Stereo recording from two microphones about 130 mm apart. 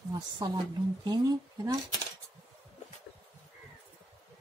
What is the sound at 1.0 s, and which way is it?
Speech, 30° right (ahead or behind).